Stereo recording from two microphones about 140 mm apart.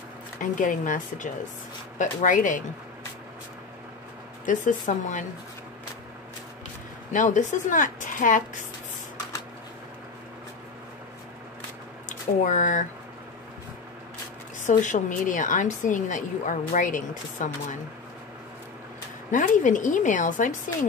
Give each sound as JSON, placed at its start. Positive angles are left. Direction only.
{"t": 0.4, "sound": "speech", "side_deg": 70}
{"t": 4.5, "sound": "a woman's voice", "side_deg": 65}
{"t": 7.1, "sound": "speech", "side_deg": 65}
{"t": 12.1, "sound": "speech", "side_deg": 65}
{"t": 14.7, "sound": "a woman's voice", "side_deg": 60}
{"t": 19.3, "sound": "a woman's voice", "side_deg": 65}